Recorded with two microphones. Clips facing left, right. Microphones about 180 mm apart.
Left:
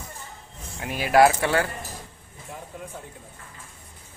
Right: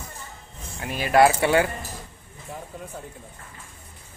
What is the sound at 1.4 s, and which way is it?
Speech, 20° right (ahead or behind).